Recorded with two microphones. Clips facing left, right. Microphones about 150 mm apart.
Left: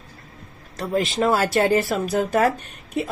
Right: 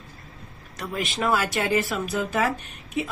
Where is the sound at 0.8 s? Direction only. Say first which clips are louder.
Left 6 dB; 30° left (ahead or behind).